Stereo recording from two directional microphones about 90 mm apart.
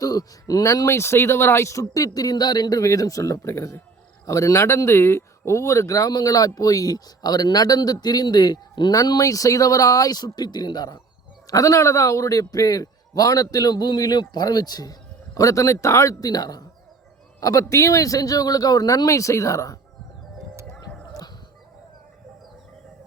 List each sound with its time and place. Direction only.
0.0 s a man's voice: 45° left (ahead or behind)
9.0 s speech: 40° left (ahead or behind)
11.5 s a man's voice: 40° left (ahead or behind)
20.7 s music: 10° left (ahead or behind)